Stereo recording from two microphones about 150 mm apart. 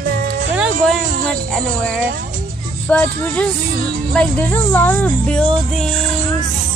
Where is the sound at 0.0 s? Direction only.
70° right (ahead or behind).